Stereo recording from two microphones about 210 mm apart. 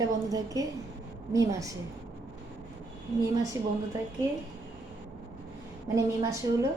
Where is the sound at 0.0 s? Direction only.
15° right (ahead or behind).